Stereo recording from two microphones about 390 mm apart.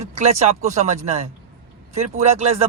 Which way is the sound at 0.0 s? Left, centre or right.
Centre.